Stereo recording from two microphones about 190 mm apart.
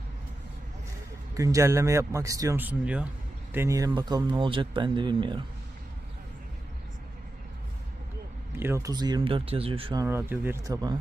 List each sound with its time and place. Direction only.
1.4 s speech: 15° right (ahead or behind)
8.5 s speech: 15° right (ahead or behind); by 10.0 s 30° right (ahead or behind)
10.0 s speech: 10° right (ahead or behind)